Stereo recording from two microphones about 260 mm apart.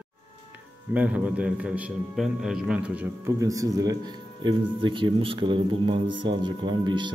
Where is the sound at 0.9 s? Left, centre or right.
Centre.